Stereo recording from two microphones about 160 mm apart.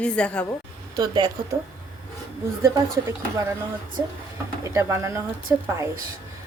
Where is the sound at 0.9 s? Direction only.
30° right (ahead or behind).